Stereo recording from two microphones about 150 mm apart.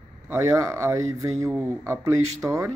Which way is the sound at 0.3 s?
20° right (ahead or behind).